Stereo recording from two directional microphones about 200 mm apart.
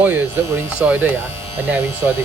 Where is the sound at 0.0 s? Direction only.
10° right (ahead or behind).